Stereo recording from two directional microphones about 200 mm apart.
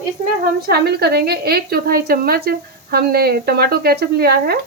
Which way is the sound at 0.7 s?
55° right (ahead or behind).